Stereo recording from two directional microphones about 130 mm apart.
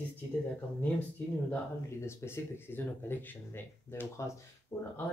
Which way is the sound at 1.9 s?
20° left (ahead or behind).